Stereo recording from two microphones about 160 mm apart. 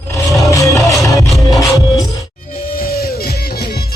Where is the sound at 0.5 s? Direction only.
20° left (ahead or behind).